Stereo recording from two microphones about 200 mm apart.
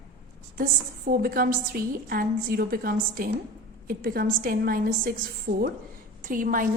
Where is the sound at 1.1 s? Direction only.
45° right (ahead or behind).